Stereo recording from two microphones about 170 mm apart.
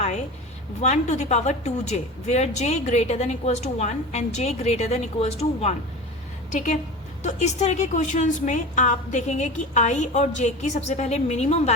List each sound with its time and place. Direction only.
0.8 s a woman's voice: 40° left (ahead or behind)